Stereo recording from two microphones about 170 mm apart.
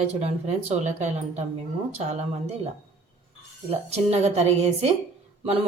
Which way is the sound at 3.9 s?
40° right (ahead or behind).